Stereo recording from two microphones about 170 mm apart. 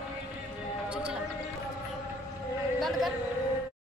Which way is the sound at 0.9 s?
5° right (ahead or behind).